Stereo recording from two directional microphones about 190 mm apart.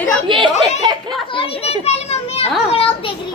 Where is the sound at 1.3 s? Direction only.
30° left (ahead or behind).